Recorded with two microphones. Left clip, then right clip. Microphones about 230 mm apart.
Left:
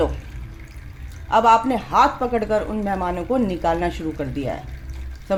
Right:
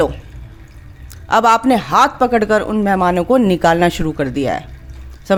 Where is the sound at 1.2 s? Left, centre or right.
Right.